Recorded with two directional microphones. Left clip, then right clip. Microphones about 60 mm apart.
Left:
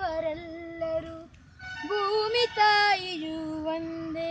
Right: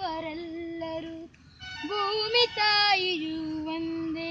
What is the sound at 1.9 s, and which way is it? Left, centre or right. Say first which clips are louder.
Music: even; left.